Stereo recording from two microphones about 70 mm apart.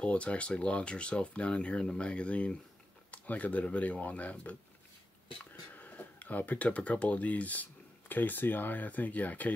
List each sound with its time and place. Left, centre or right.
0.0 s speech: centre